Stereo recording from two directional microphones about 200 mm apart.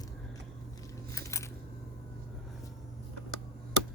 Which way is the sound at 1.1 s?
15° left (ahead or behind).